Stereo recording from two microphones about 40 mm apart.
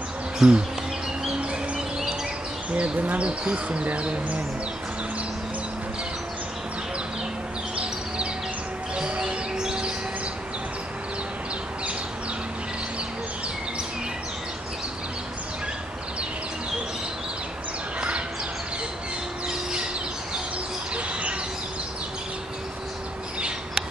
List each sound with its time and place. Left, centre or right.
0.4 s bee: centre
2.7 s speech: right
7.7 s a sound: right
8.9 s music: right
19.4 s a sound: right
20.9 s bird: right